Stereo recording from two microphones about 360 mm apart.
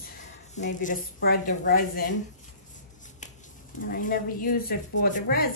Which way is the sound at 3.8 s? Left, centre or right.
Left.